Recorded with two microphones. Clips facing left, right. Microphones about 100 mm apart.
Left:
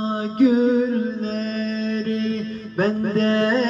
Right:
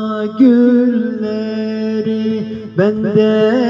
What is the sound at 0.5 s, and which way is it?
Mantra, 30° right (ahead or behind).